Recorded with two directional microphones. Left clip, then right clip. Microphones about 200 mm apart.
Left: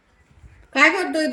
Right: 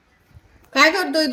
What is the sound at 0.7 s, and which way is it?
Speech, 10° right (ahead or behind).